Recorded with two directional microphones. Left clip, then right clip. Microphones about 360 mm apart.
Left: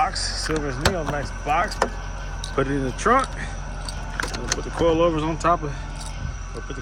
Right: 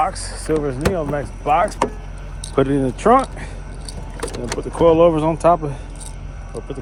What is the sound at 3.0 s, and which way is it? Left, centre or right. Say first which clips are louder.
Speech: right 5 dB; centre.